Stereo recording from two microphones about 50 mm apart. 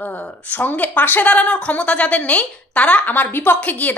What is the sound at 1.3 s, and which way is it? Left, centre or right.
A woman's voice, left.